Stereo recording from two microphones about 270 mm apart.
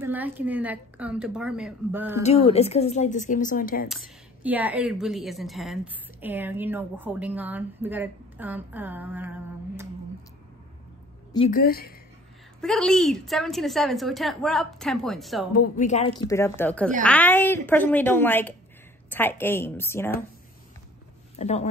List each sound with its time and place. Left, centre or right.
0.0 s a woman's voice: centre
2.2 s a woman's voice: left
3.9 s a woman's voice: centre
11.5 s a woman's voice: left
12.5 s a woman's voice: centre
15.7 s a woman's voice: left; by 20.1 s centre
21.4 s a woman's voice: left